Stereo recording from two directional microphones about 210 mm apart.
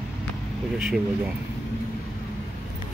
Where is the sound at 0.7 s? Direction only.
5° right (ahead or behind).